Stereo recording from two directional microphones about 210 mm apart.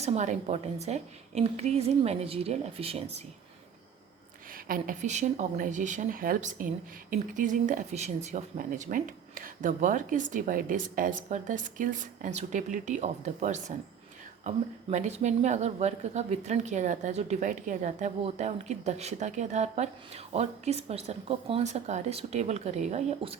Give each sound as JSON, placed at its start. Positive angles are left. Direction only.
{"t": 0.0, "sound": "speech", "side_deg": -30}
{"t": 4.5, "sound": "speech", "side_deg": -40}